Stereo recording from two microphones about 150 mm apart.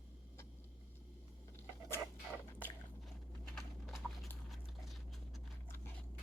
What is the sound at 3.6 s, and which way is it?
Horse, centre (ahead or behind).